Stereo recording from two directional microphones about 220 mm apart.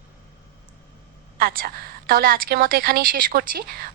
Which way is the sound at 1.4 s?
40° right (ahead or behind).